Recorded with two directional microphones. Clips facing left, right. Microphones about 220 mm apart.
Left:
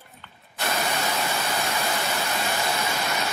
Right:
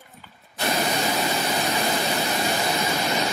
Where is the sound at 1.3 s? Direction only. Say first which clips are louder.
Right 3 dB; 15° right (ahead or behind).